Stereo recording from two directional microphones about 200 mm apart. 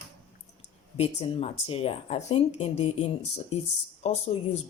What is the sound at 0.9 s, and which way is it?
Speech, 30° left (ahead or behind).